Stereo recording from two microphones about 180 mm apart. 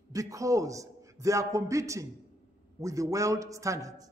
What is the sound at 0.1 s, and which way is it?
A man's voice, 20° right (ahead or behind).